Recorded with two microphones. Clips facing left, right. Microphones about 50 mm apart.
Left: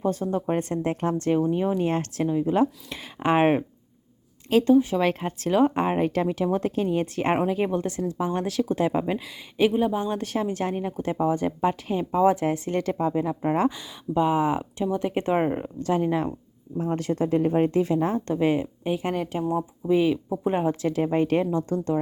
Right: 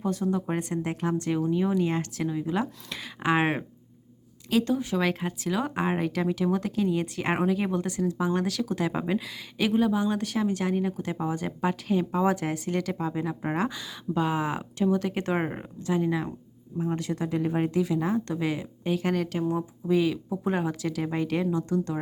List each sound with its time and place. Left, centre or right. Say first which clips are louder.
0.0 s speech: left 2 dB; left
15.4 s speech: left 8 dB; centre
15.8 s speech: left 2 dB; left